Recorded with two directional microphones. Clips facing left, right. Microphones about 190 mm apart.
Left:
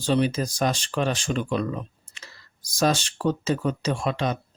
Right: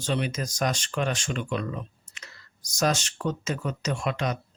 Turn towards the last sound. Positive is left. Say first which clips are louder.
# left 3 dB
turn(degrees=30)  # may be behind; listen again after turning